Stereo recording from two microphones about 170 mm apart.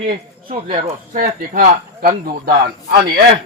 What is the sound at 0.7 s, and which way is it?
Speech, 55° right (ahead or behind).